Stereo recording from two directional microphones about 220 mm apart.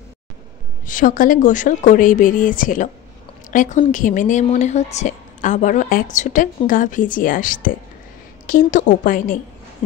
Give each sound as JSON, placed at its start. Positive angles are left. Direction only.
{"t": 0.8, "sound": "a woman's voice", "side_deg": 35}